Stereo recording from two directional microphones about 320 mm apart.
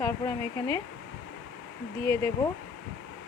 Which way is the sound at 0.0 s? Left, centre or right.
Centre.